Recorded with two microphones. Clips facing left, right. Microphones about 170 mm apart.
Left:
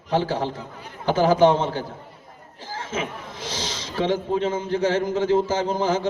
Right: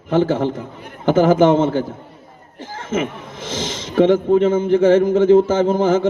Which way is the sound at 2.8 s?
50° right (ahead or behind).